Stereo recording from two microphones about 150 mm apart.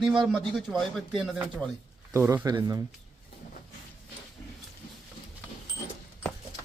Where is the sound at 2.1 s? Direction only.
20° right (ahead or behind).